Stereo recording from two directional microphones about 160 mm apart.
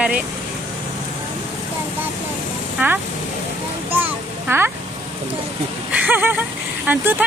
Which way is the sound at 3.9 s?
10° right (ahead or behind).